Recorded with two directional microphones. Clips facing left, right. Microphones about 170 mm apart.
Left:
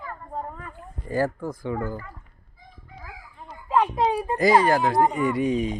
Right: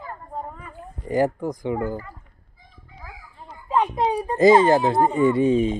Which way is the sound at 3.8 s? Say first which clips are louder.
Even; 20° right (ahead or behind).